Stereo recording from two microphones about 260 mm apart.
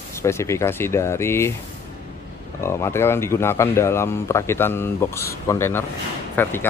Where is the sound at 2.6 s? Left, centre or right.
Centre.